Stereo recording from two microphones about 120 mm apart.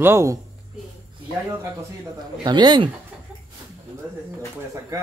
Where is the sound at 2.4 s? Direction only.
40° right (ahead or behind).